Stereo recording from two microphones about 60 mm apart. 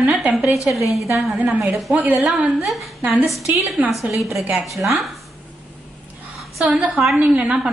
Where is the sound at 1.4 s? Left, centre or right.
Right.